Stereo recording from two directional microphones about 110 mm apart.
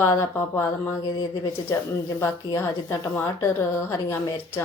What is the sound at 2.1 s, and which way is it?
A woman's voice, 25° left (ahead or behind).